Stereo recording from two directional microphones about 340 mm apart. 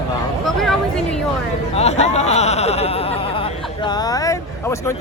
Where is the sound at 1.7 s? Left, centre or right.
Centre.